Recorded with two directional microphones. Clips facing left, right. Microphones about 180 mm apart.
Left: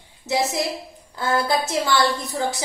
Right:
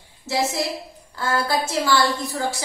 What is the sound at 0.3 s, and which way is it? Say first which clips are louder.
A woman's voice: left 1 dB; 20° left (ahead or behind).